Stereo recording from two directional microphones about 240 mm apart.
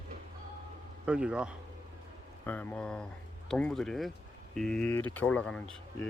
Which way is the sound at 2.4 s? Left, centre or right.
Centre.